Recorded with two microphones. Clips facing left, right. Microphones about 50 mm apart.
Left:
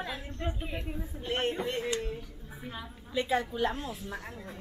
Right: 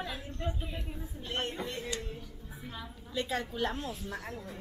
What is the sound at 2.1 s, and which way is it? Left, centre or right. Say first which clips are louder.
A woman's voice: left 3 dB; left.